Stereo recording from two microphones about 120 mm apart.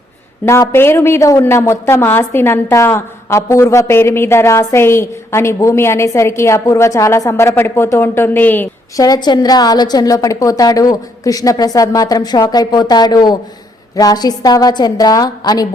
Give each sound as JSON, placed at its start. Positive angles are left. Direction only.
{"t": 0.4, "sound": "a woman's voice", "side_deg": 25}
{"t": 9.0, "sound": "a woman's voice", "side_deg": 30}